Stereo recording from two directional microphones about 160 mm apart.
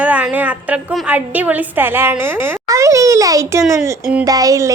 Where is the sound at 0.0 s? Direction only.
10° right (ahead or behind).